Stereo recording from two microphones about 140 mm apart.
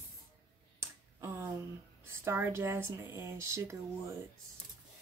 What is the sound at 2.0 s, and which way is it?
Speech, 20° right (ahead or behind).